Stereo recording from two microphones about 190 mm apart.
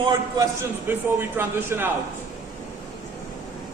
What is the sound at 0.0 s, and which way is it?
Speech, 15° right (ahead or behind).